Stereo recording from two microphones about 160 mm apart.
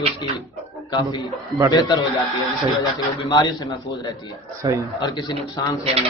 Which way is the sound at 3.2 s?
25° left (ahead or behind).